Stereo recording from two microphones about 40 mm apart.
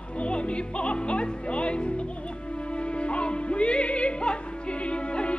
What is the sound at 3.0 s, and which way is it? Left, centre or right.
Music, left.